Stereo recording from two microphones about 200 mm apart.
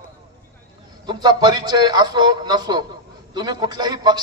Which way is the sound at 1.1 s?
20° right (ahead or behind).